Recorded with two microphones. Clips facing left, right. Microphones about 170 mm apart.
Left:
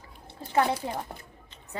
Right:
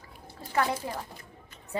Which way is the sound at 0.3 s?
25° left (ahead or behind).